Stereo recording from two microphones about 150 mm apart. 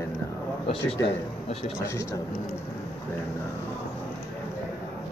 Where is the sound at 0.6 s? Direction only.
40° left (ahead or behind).